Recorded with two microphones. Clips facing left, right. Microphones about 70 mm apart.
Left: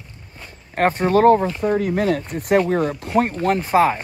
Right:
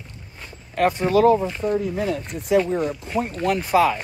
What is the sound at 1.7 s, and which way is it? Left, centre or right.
Speech, left.